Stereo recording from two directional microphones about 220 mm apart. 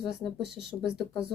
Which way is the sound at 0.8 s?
Centre (ahead or behind).